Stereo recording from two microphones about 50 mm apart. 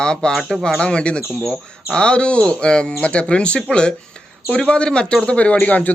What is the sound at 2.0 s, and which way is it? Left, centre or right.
A man's voice, centre.